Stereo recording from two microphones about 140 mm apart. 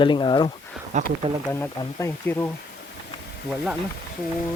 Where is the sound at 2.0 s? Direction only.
15° left (ahead or behind).